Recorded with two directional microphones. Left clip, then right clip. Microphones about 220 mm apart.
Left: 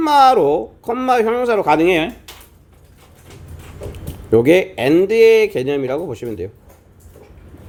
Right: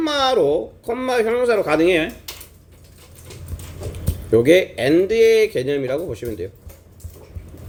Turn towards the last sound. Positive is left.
turn(degrees=20)  # may be behind; listen again after turning